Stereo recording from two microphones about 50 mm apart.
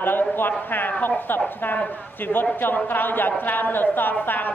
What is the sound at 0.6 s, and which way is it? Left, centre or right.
A man's voice, left.